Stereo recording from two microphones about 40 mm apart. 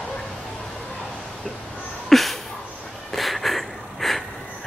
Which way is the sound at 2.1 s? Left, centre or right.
Centre.